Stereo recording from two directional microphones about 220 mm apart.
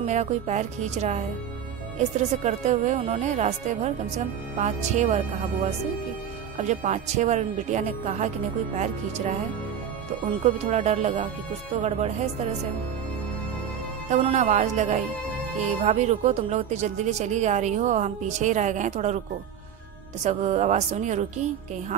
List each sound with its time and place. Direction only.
0.0 s speech: 30° right (ahead or behind)
6.6 s speech: 30° right (ahead or behind)
10.4 s speech: 30° right (ahead or behind)
14.1 s speech: 30° right (ahead or behind)
20.2 s speech: 30° right (ahead or behind)